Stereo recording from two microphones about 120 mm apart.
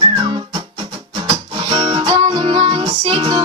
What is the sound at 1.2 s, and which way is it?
Music, 45° right (ahead or behind).